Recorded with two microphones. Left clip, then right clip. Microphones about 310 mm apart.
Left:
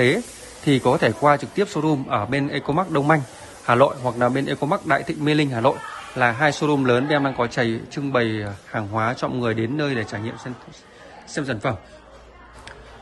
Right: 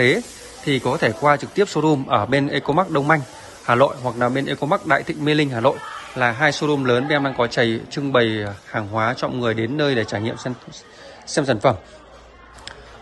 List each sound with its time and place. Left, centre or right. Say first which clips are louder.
0.7 s a man's voice: left 1 dB; centre